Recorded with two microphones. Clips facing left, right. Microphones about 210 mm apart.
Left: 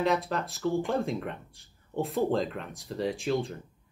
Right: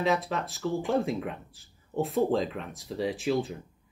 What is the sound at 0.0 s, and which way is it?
Speech, centre (ahead or behind).